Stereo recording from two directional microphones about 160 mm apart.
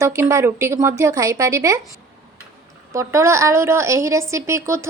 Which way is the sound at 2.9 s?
15° right (ahead or behind).